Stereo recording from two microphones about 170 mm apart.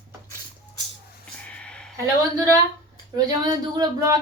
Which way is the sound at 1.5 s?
5° left (ahead or behind).